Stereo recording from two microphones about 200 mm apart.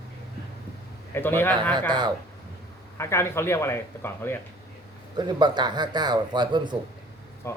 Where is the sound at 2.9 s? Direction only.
15° left (ahead or behind).